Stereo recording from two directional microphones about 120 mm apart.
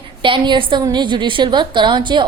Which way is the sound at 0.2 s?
40° right (ahead or behind).